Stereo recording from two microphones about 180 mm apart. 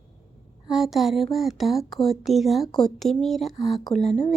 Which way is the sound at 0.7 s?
Centre (ahead or behind).